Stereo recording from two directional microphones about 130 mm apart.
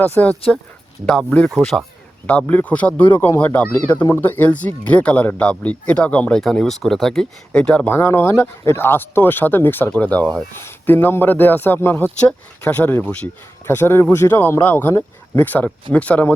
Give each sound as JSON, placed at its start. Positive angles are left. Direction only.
{"t": 0.0, "sound": "speech", "side_deg": 15}
{"t": 7.9, "sound": "speech", "side_deg": 20}